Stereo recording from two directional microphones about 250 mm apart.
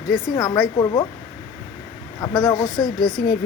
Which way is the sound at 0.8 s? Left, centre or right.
Centre.